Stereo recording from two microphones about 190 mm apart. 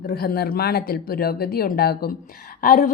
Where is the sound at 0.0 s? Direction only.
50° left (ahead or behind).